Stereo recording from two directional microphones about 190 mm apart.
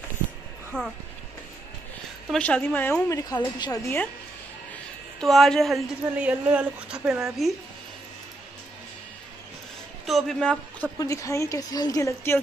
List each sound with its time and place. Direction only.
0.7 s a woman's voice: 5° left (ahead or behind)
2.3 s a woman's voice: 5° left (ahead or behind)
5.2 s speech: centre (ahead or behind)
10.0 s a man's voice: centre (ahead or behind)
11.0 s a woman's voice: 15° left (ahead or behind)